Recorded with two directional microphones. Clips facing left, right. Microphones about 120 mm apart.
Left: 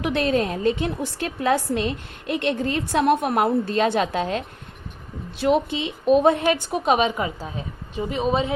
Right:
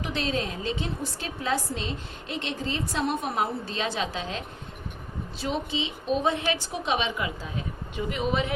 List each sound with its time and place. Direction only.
0.0 s a woman's voice: 60° left (ahead or behind)
7.9 s speech: 30° left (ahead or behind)